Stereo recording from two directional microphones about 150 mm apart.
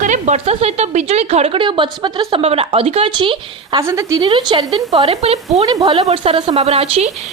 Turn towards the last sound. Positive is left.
turn(degrees=-40)  # may be behind; listen again after turning